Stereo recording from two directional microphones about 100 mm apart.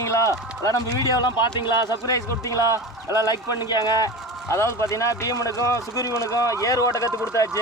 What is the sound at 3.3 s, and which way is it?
Speech, 40° left (ahead or behind).